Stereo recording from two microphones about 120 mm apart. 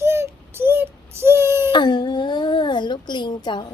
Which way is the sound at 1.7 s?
40° left (ahead or behind).